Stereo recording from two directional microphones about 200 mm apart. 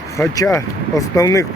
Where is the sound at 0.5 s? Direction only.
15° left (ahead or behind).